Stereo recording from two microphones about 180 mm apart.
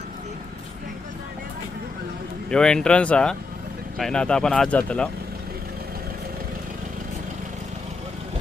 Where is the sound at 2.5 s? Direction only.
5° left (ahead or behind).